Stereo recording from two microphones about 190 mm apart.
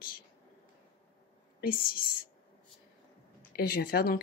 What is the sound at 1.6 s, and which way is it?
Speech, 50° left (ahead or behind).